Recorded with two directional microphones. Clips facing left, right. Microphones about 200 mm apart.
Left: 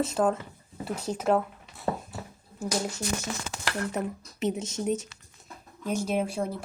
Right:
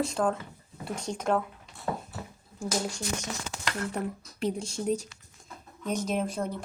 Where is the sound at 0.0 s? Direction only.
5° left (ahead or behind).